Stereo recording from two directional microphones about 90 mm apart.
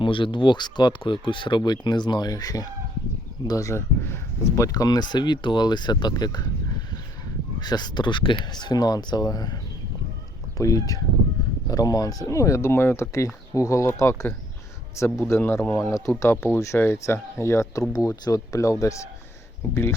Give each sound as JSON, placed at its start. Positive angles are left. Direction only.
{"t": 0.0, "sound": "speech", "side_deg": 65}
{"t": 10.6, "sound": "a man's voice", "side_deg": 40}